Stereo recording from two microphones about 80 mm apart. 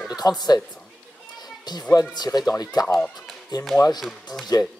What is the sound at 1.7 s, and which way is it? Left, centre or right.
Speech, left.